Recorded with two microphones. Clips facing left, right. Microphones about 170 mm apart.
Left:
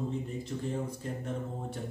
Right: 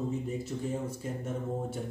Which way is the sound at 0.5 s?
5° right (ahead or behind).